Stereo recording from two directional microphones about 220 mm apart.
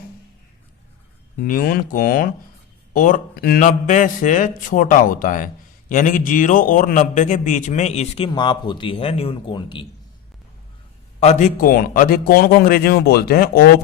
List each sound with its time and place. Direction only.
1.4 s a man's voice: 40° left (ahead or behind); by 9.8 s 20° left (ahead or behind)
11.2 s a man's voice: 30° left (ahead or behind)